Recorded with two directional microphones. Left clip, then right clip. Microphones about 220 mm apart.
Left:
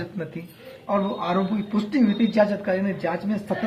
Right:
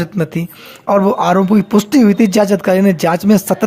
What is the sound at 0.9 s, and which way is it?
Speech, 55° right (ahead or behind).